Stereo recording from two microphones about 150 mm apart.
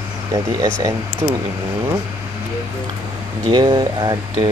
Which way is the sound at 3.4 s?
30° right (ahead or behind).